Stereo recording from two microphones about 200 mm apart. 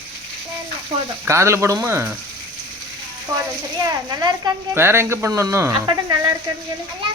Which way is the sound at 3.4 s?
20° right (ahead or behind).